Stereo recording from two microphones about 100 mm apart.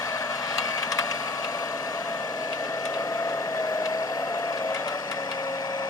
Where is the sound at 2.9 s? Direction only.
30° left (ahead or behind).